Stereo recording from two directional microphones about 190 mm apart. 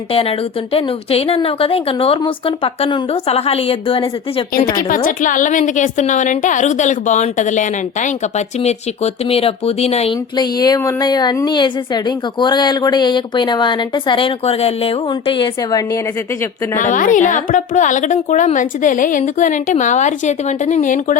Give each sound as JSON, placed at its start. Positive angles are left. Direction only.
{"t": 0.1, "sound": "speech", "side_deg": 30}
{"t": 5.0, "sound": "speech", "side_deg": 45}
{"t": 9.3, "sound": "speech", "side_deg": 30}
{"t": 16.7, "sound": "speech", "side_deg": 40}